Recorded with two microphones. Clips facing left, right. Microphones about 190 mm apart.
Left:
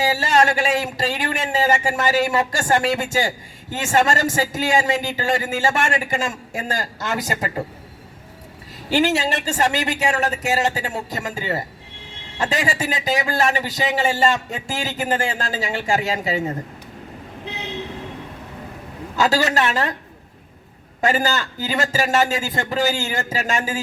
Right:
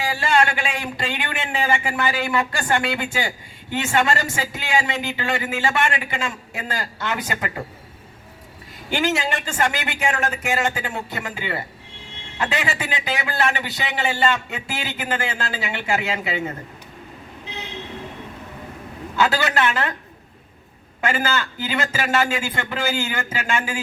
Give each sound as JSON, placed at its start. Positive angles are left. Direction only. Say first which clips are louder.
{"t": 0.2, "sound": "a man's voice", "louder": "left 2 dB", "side_deg": 40}
{"t": 8.9, "sound": "a man's voice", "louder": "left 3 dB", "side_deg": 35}
{"t": 19.1, "sound": "a man's voice", "louder": "left 2 dB", "side_deg": 40}
{"t": 21.0, "sound": "a man's voice", "louder": "left 3 dB", "side_deg": 40}